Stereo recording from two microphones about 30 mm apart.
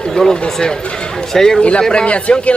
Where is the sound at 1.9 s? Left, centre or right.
Left.